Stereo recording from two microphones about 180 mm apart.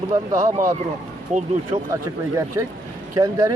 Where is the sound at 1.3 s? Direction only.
45° right (ahead or behind).